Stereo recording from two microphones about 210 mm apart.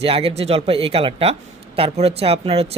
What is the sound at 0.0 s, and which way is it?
Speech, 25° right (ahead or behind).